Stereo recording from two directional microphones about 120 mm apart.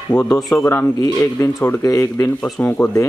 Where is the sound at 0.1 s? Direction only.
15° left (ahead or behind).